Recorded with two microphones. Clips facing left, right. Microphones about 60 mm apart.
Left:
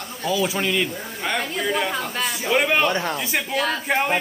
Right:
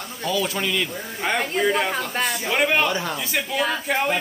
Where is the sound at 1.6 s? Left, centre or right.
Centre.